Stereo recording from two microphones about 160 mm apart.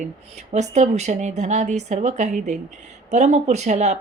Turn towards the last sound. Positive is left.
turn(degrees=-45)  # may be behind; listen again after turning